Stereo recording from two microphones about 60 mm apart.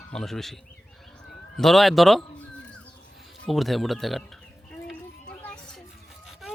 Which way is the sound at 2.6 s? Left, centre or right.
Centre.